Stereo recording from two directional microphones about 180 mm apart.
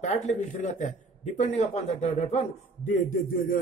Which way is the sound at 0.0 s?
40° left (ahead or behind).